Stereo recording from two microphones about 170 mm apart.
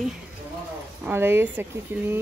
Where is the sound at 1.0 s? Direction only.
15° right (ahead or behind).